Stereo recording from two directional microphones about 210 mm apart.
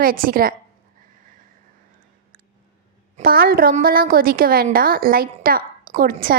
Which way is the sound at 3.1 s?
45° right (ahead or behind).